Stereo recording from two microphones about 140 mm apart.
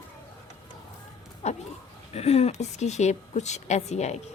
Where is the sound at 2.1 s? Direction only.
50° left (ahead or behind).